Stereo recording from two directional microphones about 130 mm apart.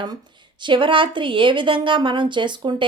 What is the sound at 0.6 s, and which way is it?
A woman's voice, 40° right (ahead or behind).